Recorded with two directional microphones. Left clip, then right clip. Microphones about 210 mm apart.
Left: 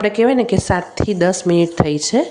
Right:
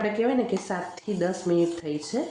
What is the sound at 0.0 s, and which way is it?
Speech, 40° left (ahead or behind).